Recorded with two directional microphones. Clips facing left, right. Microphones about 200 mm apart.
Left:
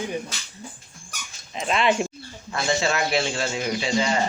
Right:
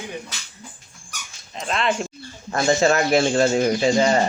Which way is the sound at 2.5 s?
45° right (ahead or behind).